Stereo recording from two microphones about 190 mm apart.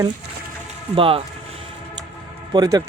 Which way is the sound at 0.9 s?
30° right (ahead or behind).